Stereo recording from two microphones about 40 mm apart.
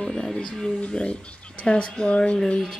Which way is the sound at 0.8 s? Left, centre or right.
Left.